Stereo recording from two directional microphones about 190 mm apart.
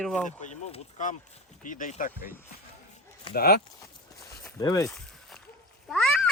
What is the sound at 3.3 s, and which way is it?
Speech, 55° left (ahead or behind).